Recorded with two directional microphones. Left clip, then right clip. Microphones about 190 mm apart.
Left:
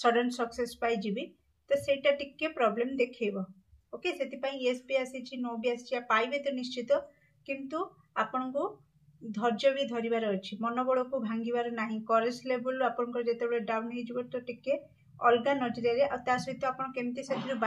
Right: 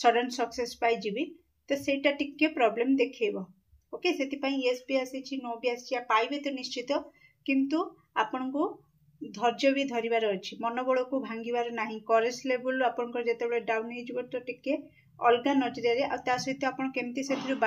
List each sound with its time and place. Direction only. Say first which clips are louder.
0.0 s speech: right 2 dB; 30° right (ahead or behind)